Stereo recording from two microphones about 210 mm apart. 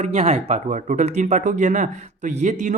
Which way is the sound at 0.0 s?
30° right (ahead or behind).